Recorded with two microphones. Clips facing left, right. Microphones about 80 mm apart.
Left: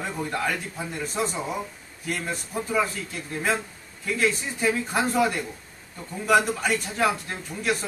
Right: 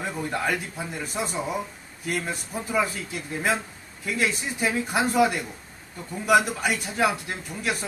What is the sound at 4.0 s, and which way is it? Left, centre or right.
A man's voice, centre.